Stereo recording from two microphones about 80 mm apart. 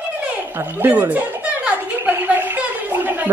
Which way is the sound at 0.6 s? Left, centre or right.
Right.